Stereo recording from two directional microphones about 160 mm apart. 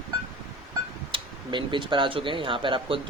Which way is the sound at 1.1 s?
30° right (ahead or behind).